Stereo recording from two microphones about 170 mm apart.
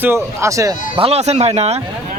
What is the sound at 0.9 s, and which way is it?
Speech, 35° right (ahead or behind).